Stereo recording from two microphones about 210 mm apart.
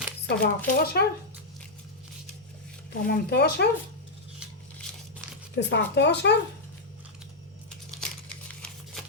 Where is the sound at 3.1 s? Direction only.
50° left (ahead or behind).